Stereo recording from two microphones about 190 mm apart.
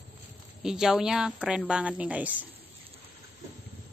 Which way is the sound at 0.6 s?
5° right (ahead or behind).